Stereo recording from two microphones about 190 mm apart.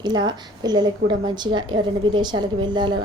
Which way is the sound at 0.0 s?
20° right (ahead or behind).